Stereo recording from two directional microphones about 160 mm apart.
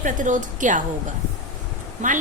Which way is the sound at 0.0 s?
50° right (ahead or behind).